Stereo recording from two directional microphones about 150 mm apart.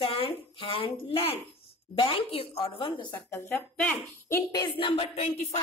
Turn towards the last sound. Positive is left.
turn(degrees=40)  # may be behind; listen again after turning